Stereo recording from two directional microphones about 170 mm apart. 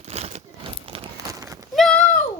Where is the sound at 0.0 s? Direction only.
40° right (ahead or behind).